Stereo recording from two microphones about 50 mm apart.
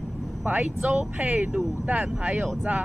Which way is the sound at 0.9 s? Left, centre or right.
Right.